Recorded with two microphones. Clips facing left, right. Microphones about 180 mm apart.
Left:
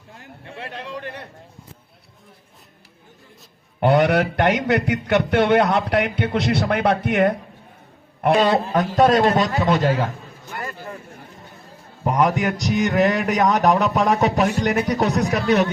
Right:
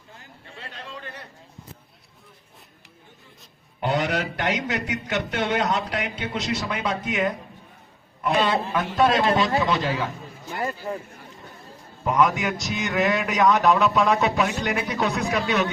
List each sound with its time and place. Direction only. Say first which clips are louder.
0.2 s a sound: left 8 dB; 65° left (ahead or behind)
3.8 s a man's voice: left 8 dB; 60° left (ahead or behind)
8.4 s a man's voice: left 2 dB; 40° left (ahead or behind)
12.0 s a man's voice: left 2 dB; 35° left (ahead or behind)